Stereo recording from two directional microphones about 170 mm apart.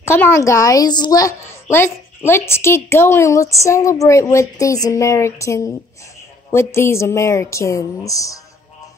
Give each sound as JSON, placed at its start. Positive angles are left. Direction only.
{"t": 0.0, "sound": "a woman's voice", "side_deg": 15}